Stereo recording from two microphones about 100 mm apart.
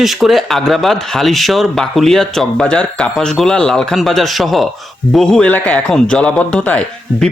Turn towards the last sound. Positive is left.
turn(degrees=15)  # may be behind; listen again after turning